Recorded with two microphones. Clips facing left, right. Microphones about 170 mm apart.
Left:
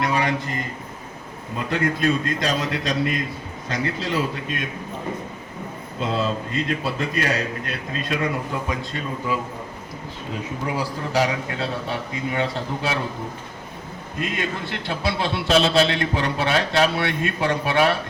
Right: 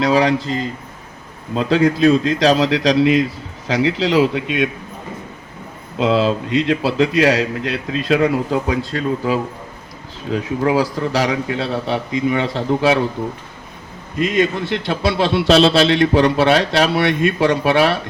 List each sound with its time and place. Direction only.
0.0 s a man's voice: 90° right
1.5 s a man's voice: 90° right
6.0 s a man's voice: 85° right
14.2 s a man's voice: 85° right